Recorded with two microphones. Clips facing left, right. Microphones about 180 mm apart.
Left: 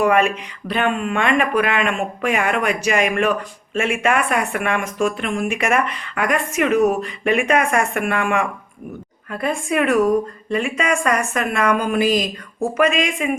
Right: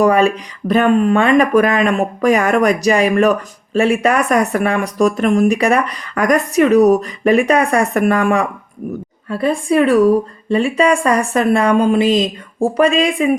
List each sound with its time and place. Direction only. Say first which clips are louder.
0.0 s speech: right 4 dB; 35° right (ahead or behind)